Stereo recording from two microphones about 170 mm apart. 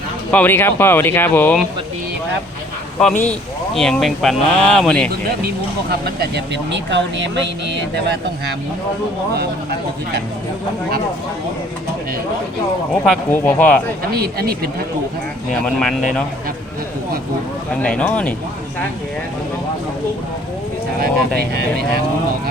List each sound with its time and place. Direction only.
0.3 s speech: 10° left (ahead or behind)
3.0 s speech: 5° left (ahead or behind)
5.9 s speech: 85° right
13.3 s speech: 10° left (ahead or behind)
14.2 s speech: 65° right (ahead or behind)
15.6 s speech: centre (ahead or behind)
17.8 s speech: 5° left (ahead or behind)
21.0 s speech: 65° right (ahead or behind)